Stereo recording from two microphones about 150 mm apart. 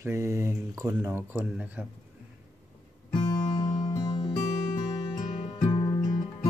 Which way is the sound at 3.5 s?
30° left (ahead or behind).